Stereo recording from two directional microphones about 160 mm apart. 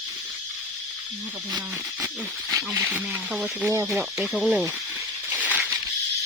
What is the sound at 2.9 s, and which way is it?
Speech, 5° right (ahead or behind).